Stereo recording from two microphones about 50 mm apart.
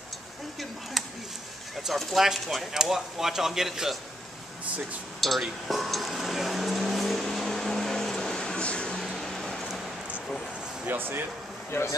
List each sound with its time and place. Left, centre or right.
2.0 s speech: centre
5.2 s a sound: centre
7.2 s vehicle: centre
8.9 s a sound: centre
10.9 s speech: right
11.7 s speech: left